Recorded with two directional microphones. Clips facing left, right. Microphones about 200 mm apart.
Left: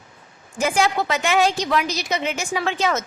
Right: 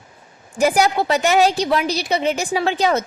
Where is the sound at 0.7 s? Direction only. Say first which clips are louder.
Even; 35° right (ahead or behind).